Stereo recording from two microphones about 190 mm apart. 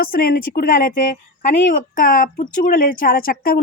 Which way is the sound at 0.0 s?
50° left (ahead or behind).